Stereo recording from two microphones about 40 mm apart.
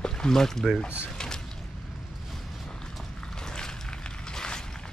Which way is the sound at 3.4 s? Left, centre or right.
Centre.